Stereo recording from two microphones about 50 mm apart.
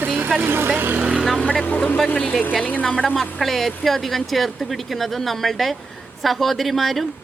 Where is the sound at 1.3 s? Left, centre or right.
Left.